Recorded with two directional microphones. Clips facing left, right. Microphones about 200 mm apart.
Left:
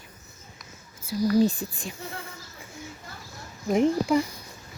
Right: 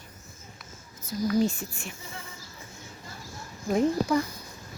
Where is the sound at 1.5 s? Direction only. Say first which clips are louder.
Left 4 dB; 35° left (ahead or behind).